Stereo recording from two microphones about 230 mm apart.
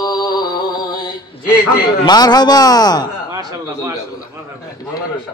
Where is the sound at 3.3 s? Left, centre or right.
Centre.